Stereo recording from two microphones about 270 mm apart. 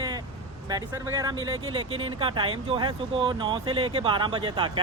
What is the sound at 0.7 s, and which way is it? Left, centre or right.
Speech, centre.